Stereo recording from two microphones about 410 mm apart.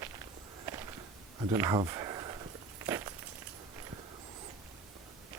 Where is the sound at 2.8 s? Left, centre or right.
Centre.